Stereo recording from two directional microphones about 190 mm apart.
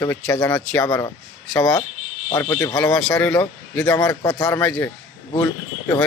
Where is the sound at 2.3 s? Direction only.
15° left (ahead or behind).